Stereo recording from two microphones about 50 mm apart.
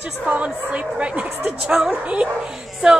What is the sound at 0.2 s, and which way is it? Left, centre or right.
A woman's voice, right.